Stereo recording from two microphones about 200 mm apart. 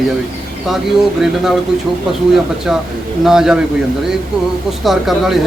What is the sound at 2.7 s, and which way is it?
Speech, 5° right (ahead or behind).